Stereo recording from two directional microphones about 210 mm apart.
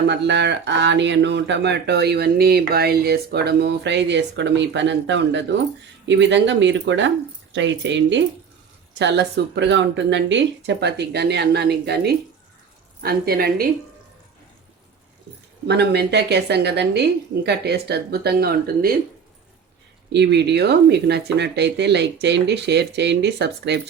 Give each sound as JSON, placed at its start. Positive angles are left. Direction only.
{"t": 0.1, "sound": "speech", "side_deg": -55}
{"t": 15.6, "sound": "speech", "side_deg": -50}
{"t": 20.1, "sound": "speech", "side_deg": -55}